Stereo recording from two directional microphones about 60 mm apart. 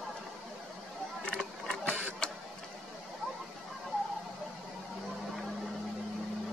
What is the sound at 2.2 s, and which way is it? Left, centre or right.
Printer, centre.